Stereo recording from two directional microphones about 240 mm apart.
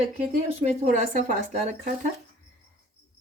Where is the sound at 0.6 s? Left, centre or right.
Right.